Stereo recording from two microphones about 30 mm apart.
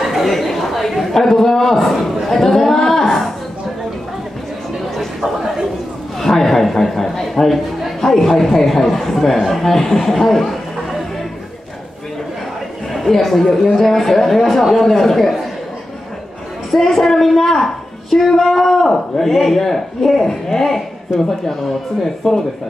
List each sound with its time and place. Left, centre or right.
0.0 s chatter: centre
0.6 s a man's voice: centre
2.2 s a sound: centre
5.2 s a sound: centre
6.2 s a sound: centre
8.0 s a man's voice: centre
12.9 s a man's voice: centre
15.1 s speech: centre
16.7 s a man's voice: centre
22.2 s speech: left